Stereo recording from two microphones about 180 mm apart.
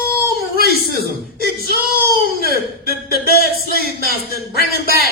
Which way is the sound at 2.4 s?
55° left (ahead or behind).